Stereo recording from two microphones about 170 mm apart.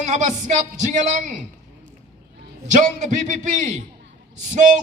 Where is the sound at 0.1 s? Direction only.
45° right (ahead or behind).